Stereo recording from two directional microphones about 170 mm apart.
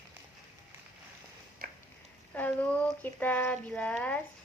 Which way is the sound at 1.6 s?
60° right (ahead or behind).